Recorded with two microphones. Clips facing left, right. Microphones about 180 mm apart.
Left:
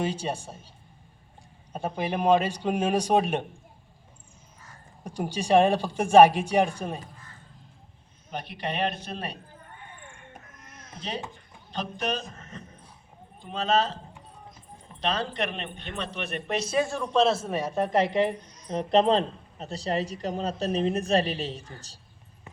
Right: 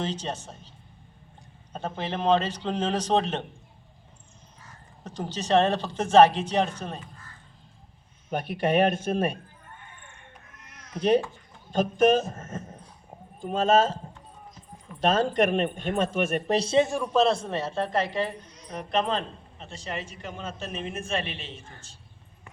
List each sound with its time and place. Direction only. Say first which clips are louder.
0.0 s speech: left 2 dB; 10° left (ahead or behind)
1.7 s speech: left 2 dB; 10° left (ahead or behind)
5.0 s speech: left 2 dB; 10° left (ahead or behind)
8.3 s speech: right 8 dB; 50° right (ahead or behind)
10.3 s baby cry: left 3 dB; 50° left (ahead or behind)
11.7 s speech: right 10 dB; 45° right (ahead or behind)
15.0 s speech: right 7 dB; 45° right (ahead or behind)
16.6 s a man's voice: right 3 dB; 25° right (ahead or behind)
17.0 s a woman's voice: even; centre (ahead or behind); by 21.9 s 35° left (ahead or behind)